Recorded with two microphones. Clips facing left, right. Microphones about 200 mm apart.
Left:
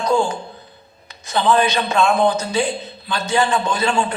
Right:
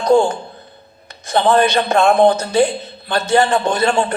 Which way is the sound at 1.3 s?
55° right (ahead or behind).